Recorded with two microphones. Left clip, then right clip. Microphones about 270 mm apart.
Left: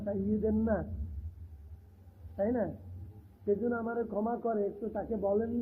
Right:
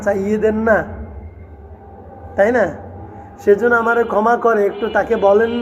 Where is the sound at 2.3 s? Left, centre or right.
Centre.